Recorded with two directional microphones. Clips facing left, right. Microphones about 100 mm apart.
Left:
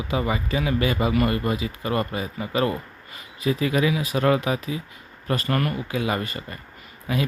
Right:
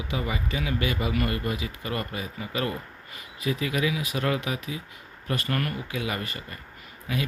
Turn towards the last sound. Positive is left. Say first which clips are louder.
# left 5 dB
turn(degrees=30)  # may be behind; listen again after turning